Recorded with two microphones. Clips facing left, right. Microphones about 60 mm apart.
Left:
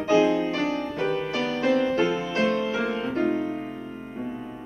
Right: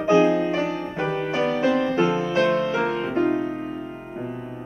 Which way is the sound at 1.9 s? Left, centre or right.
Centre.